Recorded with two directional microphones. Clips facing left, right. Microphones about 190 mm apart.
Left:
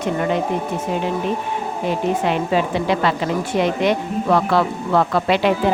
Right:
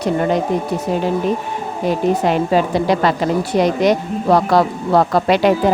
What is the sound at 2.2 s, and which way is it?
A woman's voice, 40° right (ahead or behind).